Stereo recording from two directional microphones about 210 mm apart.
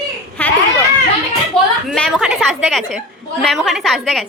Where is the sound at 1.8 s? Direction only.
Centre (ahead or behind).